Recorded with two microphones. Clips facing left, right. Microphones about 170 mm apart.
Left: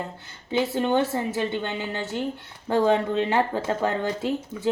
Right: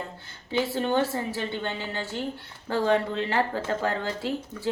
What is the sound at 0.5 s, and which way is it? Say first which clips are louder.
A woman's voice: left 3 dB; 15° left (ahead or behind).